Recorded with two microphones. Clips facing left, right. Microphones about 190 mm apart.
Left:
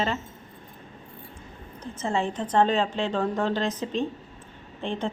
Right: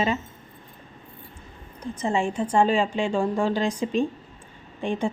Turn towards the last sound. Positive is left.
turn(degrees=-10)  # may be behind; listen again after turning